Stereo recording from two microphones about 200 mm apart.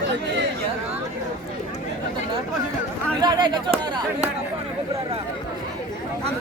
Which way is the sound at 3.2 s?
20° right (ahead or behind).